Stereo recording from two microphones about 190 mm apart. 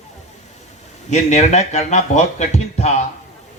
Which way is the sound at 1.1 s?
35° left (ahead or behind).